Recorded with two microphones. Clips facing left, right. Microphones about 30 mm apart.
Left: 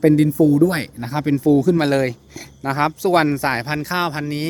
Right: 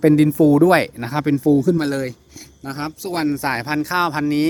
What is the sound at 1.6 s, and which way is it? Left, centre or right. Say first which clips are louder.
Speech: left 2 dB; left.